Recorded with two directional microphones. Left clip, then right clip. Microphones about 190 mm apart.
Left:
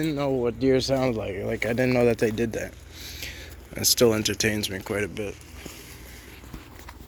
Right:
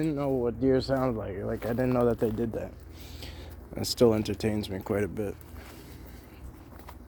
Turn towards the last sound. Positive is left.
turn(degrees=-25)  # may be behind; listen again after turning